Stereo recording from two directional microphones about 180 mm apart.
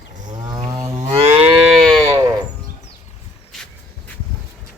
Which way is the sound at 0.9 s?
35° right (ahead or behind).